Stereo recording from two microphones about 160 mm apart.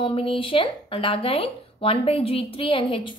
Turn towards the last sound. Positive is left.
turn(degrees=35)  # may be behind; listen again after turning